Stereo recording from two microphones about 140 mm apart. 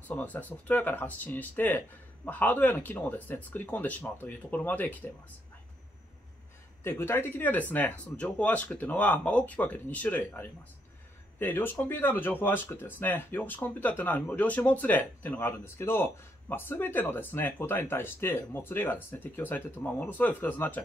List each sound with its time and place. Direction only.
0.1 s speech: 10° left (ahead or behind)
6.8 s speech: 15° left (ahead or behind)